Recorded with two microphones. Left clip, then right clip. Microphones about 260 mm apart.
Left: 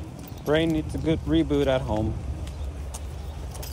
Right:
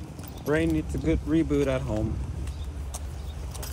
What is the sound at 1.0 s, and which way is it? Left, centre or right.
Speech, centre.